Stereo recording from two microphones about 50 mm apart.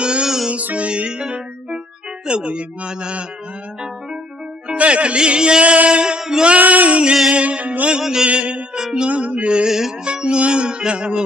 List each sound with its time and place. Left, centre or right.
0.0 s music: centre
0.5 s music: right
4.6 s music: right
6.6 s music: right
8.0 s mantra: centre
8.3 s music: right
9.7 s mantra: centre
10.0 s music: centre